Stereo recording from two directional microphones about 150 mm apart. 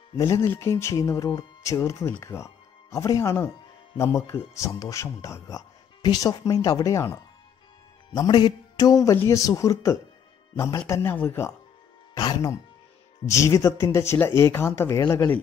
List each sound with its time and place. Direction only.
0.2 s speech: 20° left (ahead or behind)